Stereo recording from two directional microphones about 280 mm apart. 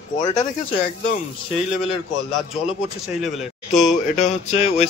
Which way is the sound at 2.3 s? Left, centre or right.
Centre.